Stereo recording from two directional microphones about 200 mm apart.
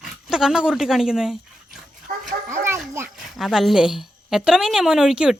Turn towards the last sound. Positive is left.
turn(degrees=-5)  # may be behind; listen again after turning